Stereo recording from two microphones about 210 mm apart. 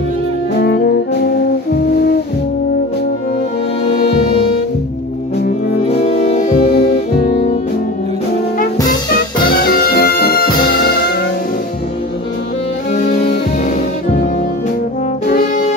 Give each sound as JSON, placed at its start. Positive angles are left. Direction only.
{"t": 0.6, "sound": "music", "side_deg": 50}
{"t": 6.2, "sound": "music", "side_deg": 30}
{"t": 6.7, "sound": "music", "side_deg": 50}
{"t": 7.2, "sound": "music", "side_deg": 30}
{"t": 9.5, "sound": "music", "side_deg": 45}
{"t": 15.2, "sound": "brass instrument", "side_deg": 40}